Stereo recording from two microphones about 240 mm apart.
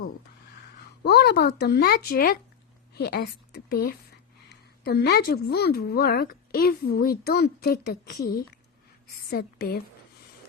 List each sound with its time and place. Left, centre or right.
1.0 s a woman's voice: left
9.3 s a woman's voice: left